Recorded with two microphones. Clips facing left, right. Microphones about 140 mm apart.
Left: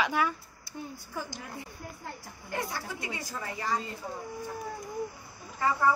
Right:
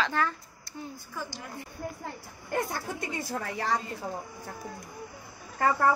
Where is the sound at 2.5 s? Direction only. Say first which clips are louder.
Right 4 dB; 50° right (ahead or behind); by 3.8 s 70° right (ahead or behind).